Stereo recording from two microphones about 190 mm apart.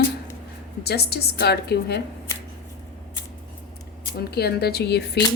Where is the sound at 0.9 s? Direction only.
55° left (ahead or behind).